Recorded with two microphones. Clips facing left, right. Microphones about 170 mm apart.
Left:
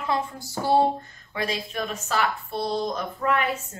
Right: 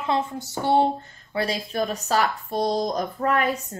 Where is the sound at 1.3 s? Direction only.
35° right (ahead or behind).